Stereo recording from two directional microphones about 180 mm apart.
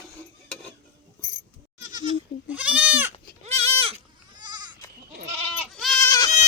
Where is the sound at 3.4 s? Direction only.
35° right (ahead or behind).